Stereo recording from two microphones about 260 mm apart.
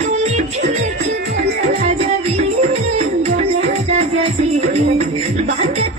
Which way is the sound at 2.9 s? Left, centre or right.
Right.